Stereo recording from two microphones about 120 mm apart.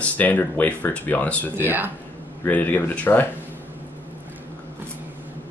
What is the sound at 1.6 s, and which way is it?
Speech, 15° right (ahead or behind).